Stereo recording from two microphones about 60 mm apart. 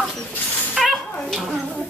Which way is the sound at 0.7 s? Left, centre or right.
Centre.